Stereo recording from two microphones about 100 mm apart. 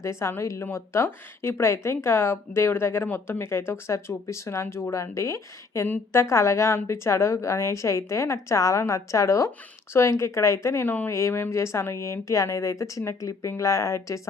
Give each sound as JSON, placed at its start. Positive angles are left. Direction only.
{"t": 0.0, "sound": "speech", "side_deg": 30}
{"t": 10.8, "sound": "speech", "side_deg": 15}